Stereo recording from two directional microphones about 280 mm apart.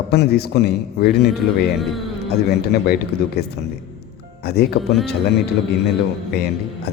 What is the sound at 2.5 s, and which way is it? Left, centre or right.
Speech, left.